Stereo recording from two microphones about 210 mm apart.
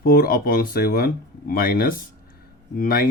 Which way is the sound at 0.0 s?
45° left (ahead or behind).